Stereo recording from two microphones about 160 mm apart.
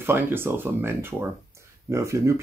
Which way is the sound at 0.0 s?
15° right (ahead or behind).